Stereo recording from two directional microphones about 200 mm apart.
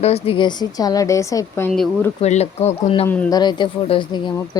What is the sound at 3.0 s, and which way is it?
Speech, 5° left (ahead or behind).